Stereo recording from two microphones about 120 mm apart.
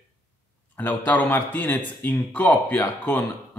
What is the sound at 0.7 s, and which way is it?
Speech, 15° left (ahead or behind).